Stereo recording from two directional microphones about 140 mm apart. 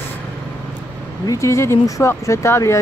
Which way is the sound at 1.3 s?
20° left (ahead or behind).